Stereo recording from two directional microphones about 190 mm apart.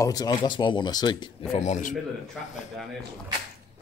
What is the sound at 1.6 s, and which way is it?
Speech, 40° left (ahead or behind).